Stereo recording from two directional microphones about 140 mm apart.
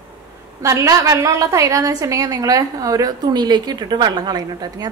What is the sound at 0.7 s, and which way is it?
A woman's voice, 20° right (ahead or behind).